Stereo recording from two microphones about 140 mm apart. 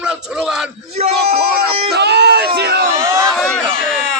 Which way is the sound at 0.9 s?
50° right (ahead or behind).